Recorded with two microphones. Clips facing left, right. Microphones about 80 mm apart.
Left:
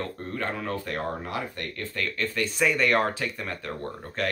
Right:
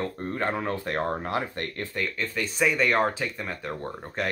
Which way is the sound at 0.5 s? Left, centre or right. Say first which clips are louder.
Right 3 dB; right.